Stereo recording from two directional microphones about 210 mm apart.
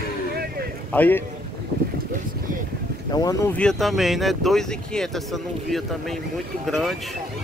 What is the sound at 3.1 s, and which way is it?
Speech, 15° left (ahead or behind).